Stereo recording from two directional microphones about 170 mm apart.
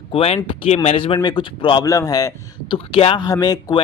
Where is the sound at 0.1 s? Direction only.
35° left (ahead or behind).